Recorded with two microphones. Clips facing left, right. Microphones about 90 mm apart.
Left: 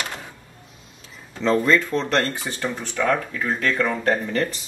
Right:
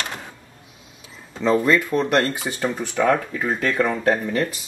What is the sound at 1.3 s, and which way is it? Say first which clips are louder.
Speech: right 1 dB; 5° right (ahead or behind).